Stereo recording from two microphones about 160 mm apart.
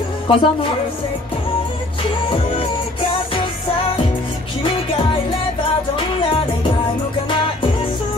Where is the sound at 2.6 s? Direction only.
35° left (ahead or behind).